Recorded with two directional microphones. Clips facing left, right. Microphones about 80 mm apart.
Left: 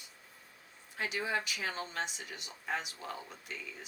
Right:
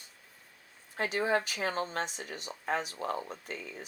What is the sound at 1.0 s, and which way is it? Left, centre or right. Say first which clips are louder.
Speech: right 6 dB; right.